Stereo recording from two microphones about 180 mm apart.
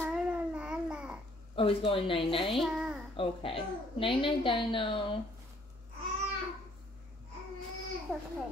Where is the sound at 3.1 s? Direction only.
30° left (ahead or behind).